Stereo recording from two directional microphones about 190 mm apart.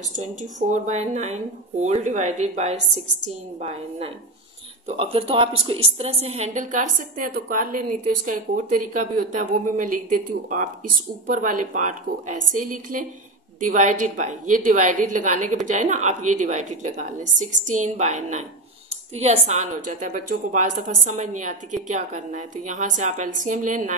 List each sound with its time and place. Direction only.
0.1 s a woman's voice: 40° right (ahead or behind)
4.8 s a woman's voice: 30° right (ahead or behind)